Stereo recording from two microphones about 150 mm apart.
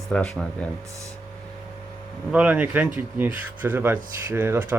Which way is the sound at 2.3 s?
10° right (ahead or behind).